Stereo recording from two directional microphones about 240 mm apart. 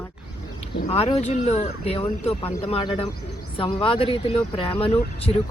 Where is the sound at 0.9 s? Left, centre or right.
Left.